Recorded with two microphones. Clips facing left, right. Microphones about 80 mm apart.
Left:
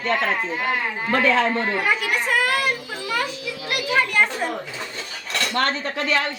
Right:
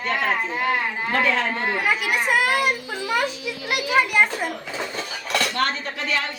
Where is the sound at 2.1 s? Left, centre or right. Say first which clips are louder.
Right 1 dB; centre.